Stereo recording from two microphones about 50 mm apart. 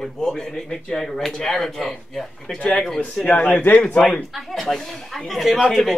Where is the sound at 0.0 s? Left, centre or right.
Centre.